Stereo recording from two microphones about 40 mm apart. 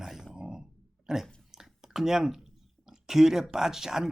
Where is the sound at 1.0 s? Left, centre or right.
Centre.